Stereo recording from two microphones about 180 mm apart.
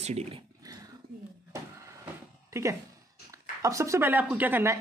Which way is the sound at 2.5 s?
15° right (ahead or behind).